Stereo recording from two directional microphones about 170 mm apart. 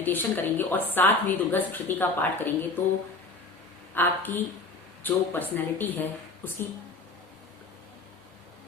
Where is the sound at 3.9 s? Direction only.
10° left (ahead or behind).